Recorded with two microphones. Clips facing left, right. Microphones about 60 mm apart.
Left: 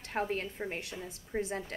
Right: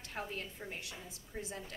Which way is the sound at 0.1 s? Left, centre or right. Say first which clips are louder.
Left 9 dB; left.